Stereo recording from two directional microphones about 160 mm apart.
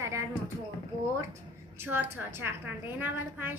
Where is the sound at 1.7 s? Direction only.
15° right (ahead or behind).